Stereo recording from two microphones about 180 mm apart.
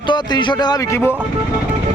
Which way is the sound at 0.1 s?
25° left (ahead or behind).